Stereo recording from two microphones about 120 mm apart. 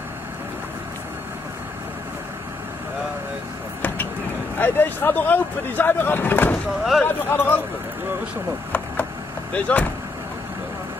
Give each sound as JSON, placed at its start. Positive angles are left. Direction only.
{"t": 4.6, "sound": "speech", "side_deg": 15}
{"t": 6.8, "sound": "speech", "side_deg": 0}
{"t": 7.1, "sound": "speech", "side_deg": 20}
{"t": 9.5, "sound": "speech", "side_deg": 10}